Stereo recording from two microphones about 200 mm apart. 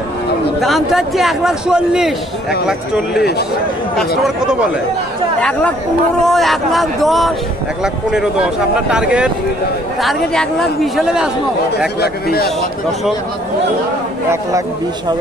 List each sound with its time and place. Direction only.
0.6 s a man's voice: centre (ahead or behind)
4.4 s a man's voice: 5° right (ahead or behind)
6.2 s a man's voice: centre (ahead or behind)
12.0 s speech: 50° left (ahead or behind)